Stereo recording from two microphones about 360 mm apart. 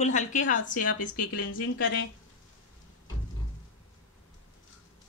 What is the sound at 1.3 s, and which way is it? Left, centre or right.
Speech, left.